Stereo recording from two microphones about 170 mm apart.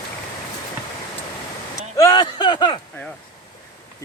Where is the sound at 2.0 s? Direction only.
20° left (ahead or behind).